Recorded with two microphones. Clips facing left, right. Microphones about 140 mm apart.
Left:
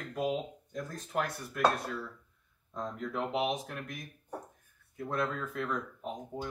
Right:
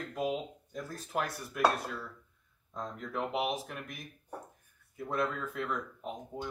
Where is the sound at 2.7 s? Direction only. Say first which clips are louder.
Left 2 dB; centre (ahead or behind).